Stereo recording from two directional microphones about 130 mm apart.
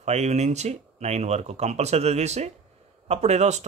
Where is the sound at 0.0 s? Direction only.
60° right (ahead or behind).